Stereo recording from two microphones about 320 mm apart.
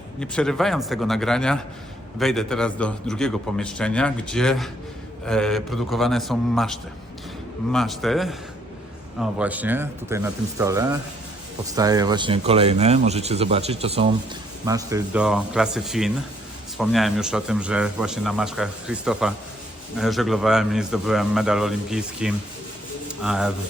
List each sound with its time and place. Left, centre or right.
0.2 s a man's voice: centre